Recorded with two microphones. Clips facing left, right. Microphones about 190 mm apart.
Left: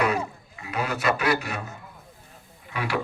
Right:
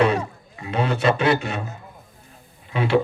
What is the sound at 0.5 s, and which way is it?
A man's voice, 30° right (ahead or behind).